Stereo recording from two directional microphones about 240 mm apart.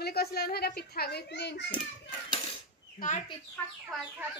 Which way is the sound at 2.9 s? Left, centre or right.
Left.